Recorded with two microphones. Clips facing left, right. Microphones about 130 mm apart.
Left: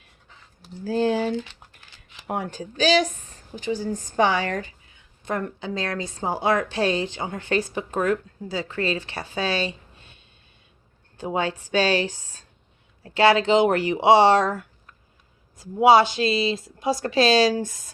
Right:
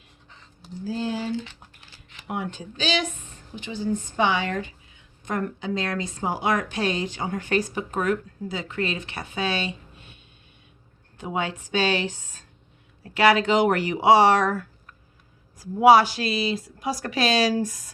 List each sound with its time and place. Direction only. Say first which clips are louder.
0.9 s speech: left 6 dB; 60° left (ahead or behind)
2.2 s a woman's voice: left 2 dB; 40° left (ahead or behind)
11.2 s a woman's voice: left 3 dB; 30° left (ahead or behind)